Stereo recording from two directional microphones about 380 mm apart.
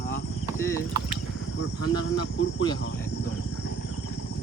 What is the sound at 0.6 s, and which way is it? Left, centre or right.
Clip-clop, centre.